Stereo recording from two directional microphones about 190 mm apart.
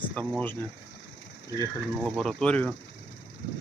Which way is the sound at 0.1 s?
10° left (ahead or behind).